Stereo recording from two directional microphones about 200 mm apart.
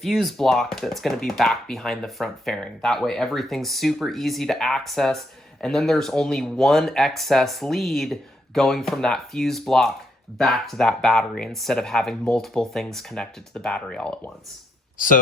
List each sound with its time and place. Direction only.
0.0 s speech: centre (ahead or behind)
14.9 s speech: 45° left (ahead or behind)